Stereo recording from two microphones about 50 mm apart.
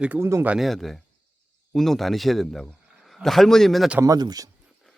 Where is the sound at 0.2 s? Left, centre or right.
Right.